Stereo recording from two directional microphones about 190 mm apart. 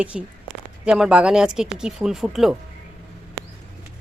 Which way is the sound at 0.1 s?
Centre (ahead or behind).